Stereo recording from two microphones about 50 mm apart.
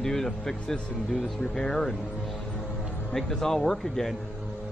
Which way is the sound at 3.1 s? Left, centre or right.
Centre.